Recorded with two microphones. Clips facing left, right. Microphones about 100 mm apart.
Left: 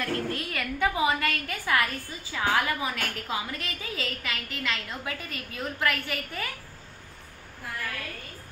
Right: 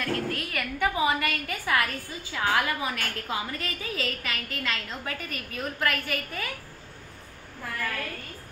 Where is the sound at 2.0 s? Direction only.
20° left (ahead or behind).